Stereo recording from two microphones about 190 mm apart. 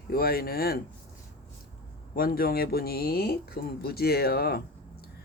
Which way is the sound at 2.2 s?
50° left (ahead or behind).